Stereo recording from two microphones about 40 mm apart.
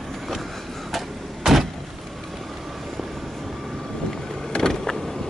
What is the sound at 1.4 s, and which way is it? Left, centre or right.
Vehicle, centre.